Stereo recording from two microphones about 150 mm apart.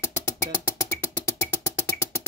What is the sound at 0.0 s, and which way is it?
Music, 15° left (ahead or behind).